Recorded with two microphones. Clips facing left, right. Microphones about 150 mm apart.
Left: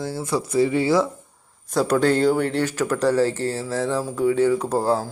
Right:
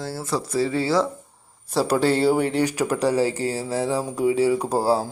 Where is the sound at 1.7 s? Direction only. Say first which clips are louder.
Left 1 dB; 5° right (ahead or behind).